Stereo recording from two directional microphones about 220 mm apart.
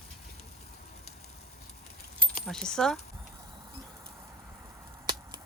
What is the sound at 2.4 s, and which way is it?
Speech, 5° left (ahead or behind).